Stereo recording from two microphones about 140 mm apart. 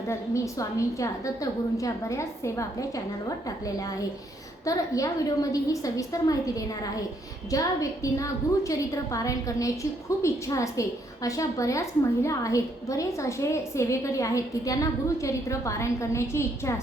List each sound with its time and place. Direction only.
0.1 s a woman's voice: 20° left (ahead or behind)
4.6 s a woman's voice: 25° left (ahead or behind)